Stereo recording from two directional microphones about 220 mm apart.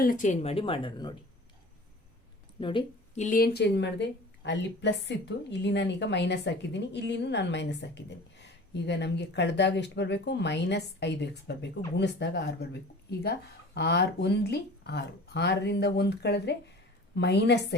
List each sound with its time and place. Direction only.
0.0 s speech: 35° left (ahead or behind); by 1.1 s 20° left (ahead or behind)
2.6 s speech: 20° left (ahead or behind)
3.2 s a woman's voice: 45° left (ahead or behind)
13.7 s a woman's voice: 50° left (ahead or behind)